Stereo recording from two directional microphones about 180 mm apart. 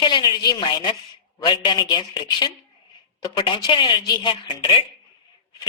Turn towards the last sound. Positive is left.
turn(degrees=25)  # may be behind; listen again after turning